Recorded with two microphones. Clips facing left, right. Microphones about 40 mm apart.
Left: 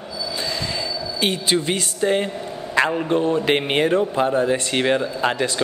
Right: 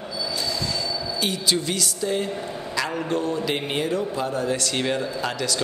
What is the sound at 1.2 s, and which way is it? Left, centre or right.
A man's voice, left.